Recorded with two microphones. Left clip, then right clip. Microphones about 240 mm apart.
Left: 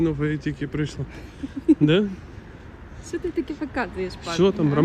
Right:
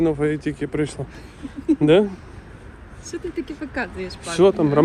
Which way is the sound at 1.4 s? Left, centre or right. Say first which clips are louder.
Left 1 dB; centre.